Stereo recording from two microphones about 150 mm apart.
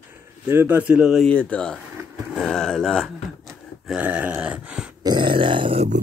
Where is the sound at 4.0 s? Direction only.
10° right (ahead or behind).